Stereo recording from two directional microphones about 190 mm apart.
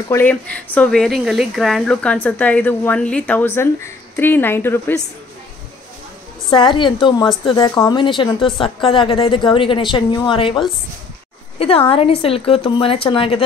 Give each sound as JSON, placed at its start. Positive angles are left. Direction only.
{"t": 0.1, "sound": "speech", "side_deg": 10}
{"t": 6.5, "sound": "speech", "side_deg": 25}
{"t": 11.5, "sound": "a sound", "side_deg": 30}
{"t": 11.9, "sound": "speech", "side_deg": 30}